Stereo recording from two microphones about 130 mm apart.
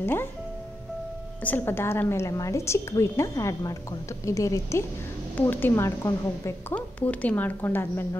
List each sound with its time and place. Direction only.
0.0 s speech: 15° left (ahead or behind)
1.4 s a woman's voice: 15° left (ahead or behind)
6.7 s speech: 10° left (ahead or behind)